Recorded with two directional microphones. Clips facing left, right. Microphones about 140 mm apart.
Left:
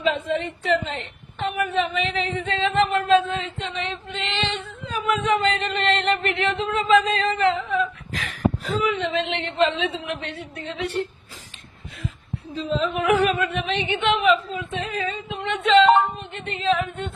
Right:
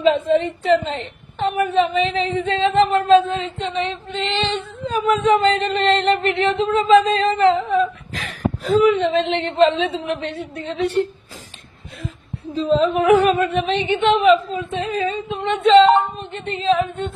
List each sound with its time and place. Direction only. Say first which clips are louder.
0.0 s a woman's voice: right 7 dB; 30° right (ahead or behind)
12.5 s a woman's voice: right 7 dB; 35° right (ahead or behind)